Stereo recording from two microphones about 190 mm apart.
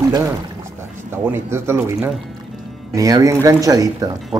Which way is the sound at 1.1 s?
15° right (ahead or behind).